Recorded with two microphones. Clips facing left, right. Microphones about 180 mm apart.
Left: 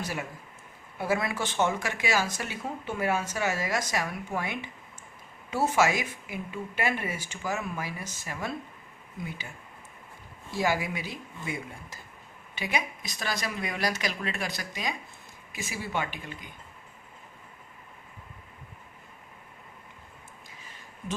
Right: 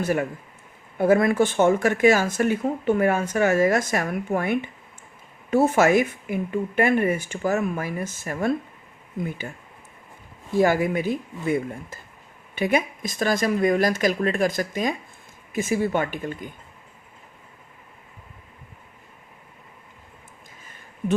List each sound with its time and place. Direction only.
0.0 s speech: 55° right (ahead or behind)
10.5 s speech: 50° right (ahead or behind)
20.6 s a sound: 50° right (ahead or behind)